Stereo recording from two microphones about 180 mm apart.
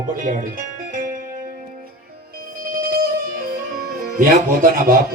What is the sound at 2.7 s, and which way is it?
Music, 50° right (ahead or behind).